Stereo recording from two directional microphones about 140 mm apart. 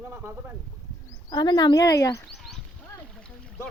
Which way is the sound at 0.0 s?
15° right (ahead or behind).